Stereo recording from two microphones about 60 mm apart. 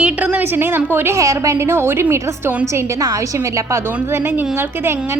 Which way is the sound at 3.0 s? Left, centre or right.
Right.